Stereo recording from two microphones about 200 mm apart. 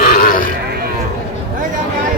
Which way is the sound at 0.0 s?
45° left (ahead or behind).